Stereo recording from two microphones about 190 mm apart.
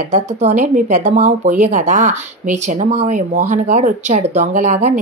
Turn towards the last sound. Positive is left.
turn(degrees=-40)  # may be behind; listen again after turning